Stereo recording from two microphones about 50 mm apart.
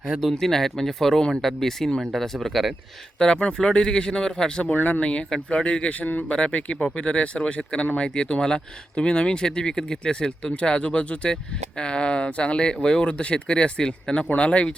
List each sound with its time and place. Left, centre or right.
0.1 s speech: centre
3.2 s speech: centre
4.7 s speech: left
6.7 s speech: centre
7.0 s speech: left